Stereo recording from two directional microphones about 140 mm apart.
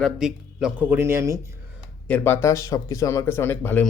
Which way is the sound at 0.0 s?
5° right (ahead or behind).